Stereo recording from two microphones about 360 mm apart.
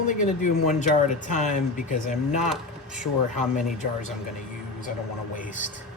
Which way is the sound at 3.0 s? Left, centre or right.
Left.